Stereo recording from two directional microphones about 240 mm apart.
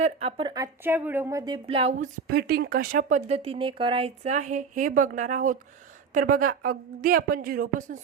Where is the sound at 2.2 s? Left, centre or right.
Right.